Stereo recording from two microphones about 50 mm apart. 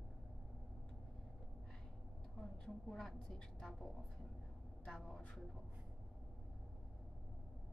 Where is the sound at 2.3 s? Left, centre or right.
Centre.